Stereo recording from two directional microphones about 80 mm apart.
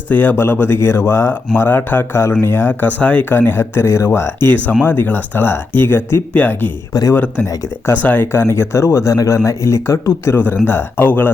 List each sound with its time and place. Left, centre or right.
0.1 s speech: left
3.0 s speech: centre
6.9 s speech: left
8.0 s speech: left
10.3 s speech: left